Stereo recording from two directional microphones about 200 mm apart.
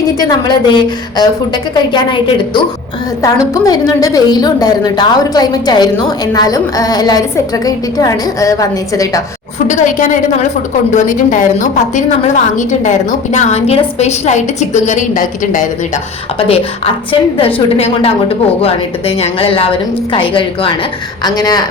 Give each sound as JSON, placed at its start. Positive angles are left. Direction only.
{"t": 0.2, "sound": "a woman's voice", "side_deg": 20}
{"t": 10.9, "sound": "a woman's voice", "side_deg": 40}
{"t": 16.5, "sound": "a woman's voice", "side_deg": 30}